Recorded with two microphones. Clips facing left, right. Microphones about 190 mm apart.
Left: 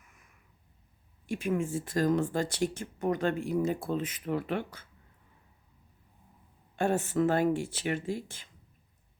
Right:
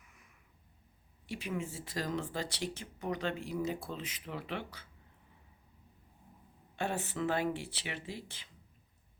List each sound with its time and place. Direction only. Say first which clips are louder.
1.3 s speech: left 8 dB; 50° left (ahead or behind)
6.7 s speech: left 8 dB; 45° left (ahead or behind)